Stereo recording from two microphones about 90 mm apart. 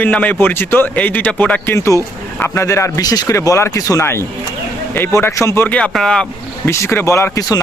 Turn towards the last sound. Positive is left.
turn(degrees=35)  # may be behind; listen again after turning